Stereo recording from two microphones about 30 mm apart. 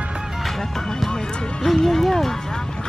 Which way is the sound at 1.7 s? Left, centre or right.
Centre.